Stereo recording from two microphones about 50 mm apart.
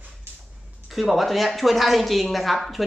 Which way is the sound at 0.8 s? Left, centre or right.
Centre.